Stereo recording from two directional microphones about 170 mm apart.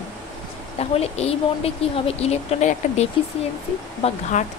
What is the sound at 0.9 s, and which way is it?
Speech, 35° left (ahead or behind).